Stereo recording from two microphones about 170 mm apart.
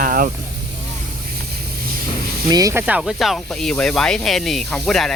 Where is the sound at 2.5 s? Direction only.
20° right (ahead or behind).